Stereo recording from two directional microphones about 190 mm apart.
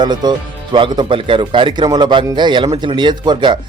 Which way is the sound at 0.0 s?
20° right (ahead or behind).